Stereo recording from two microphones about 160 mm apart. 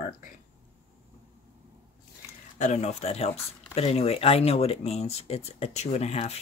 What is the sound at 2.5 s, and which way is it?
Speech, 45° left (ahead or behind).